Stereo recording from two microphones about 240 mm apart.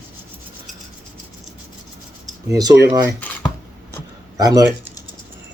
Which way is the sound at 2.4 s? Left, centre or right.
Centre.